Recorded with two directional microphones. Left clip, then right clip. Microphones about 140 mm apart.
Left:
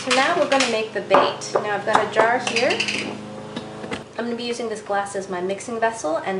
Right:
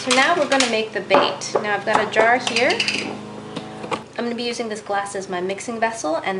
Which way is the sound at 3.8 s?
15° right (ahead or behind).